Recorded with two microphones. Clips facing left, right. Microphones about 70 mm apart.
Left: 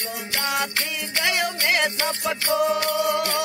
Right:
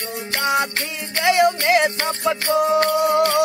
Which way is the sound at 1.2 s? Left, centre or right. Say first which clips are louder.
Right 9 dB; right.